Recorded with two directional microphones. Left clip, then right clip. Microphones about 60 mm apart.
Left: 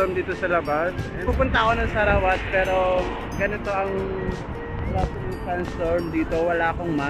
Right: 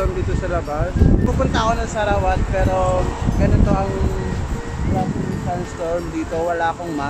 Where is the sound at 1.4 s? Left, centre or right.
Right.